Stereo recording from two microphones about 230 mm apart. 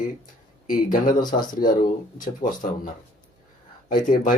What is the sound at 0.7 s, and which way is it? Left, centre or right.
Speech, left.